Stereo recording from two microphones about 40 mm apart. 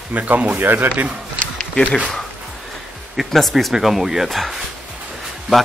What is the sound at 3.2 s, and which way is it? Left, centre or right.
A man's voice, centre.